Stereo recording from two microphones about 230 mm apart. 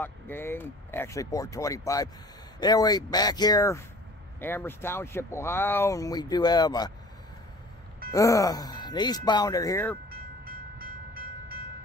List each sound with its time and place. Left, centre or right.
0.0 s speech: centre
8.1 s speech: centre
10.0 s train: right